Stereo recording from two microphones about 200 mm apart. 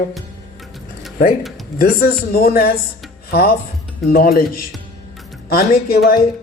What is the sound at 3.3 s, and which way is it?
Music, 50° left (ahead or behind).